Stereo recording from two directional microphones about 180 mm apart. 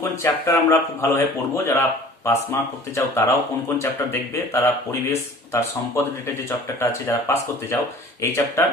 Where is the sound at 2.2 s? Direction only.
15° left (ahead or behind).